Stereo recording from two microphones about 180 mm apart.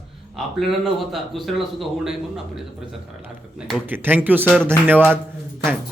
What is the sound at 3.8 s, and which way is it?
Speech, 10° right (ahead or behind).